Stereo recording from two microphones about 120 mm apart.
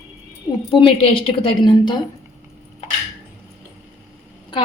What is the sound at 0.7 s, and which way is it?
A woman's voice, 50° left (ahead or behind).